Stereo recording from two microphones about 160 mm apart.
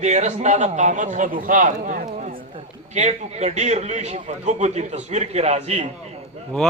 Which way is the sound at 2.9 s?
45° right (ahead or behind).